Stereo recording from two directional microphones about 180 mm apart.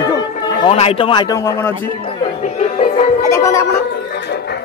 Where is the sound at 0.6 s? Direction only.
35° left (ahead or behind); by 1.7 s 15° left (ahead or behind).